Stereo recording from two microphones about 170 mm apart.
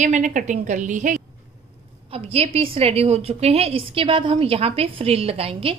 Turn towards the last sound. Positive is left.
turn(degrees=-35)  # may be behind; listen again after turning